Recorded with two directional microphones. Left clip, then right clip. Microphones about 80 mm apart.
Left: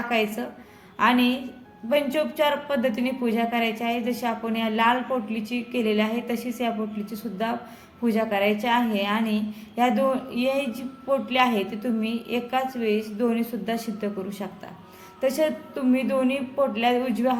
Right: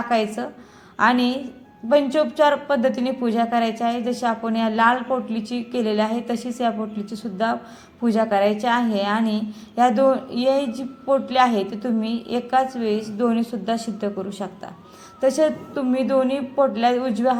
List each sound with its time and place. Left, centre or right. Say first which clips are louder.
0.1 s a woman's voice: right 4 dB; centre